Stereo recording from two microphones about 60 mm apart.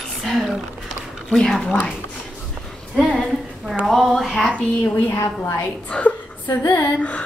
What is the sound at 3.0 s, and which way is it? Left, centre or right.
A woman's voice, centre.